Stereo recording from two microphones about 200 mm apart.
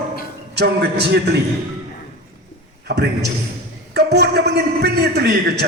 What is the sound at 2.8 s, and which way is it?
A man's voice, 55° right (ahead or behind).